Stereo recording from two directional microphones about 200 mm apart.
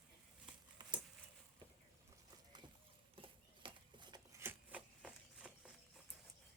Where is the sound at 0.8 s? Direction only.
20° right (ahead or behind).